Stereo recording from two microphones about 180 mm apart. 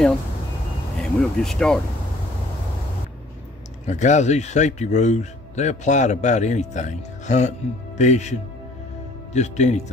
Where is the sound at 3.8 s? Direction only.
40° left (ahead or behind).